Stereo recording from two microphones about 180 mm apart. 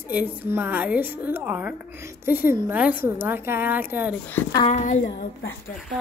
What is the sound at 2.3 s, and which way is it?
A woman's voice, 10° right (ahead or behind).